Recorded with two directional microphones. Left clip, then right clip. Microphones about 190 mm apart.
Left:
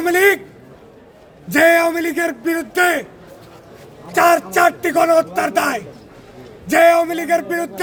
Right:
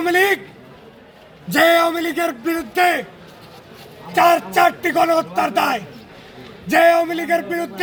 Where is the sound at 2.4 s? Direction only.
20° left (ahead or behind).